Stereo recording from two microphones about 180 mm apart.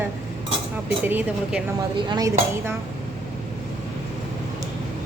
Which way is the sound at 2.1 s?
20° right (ahead or behind).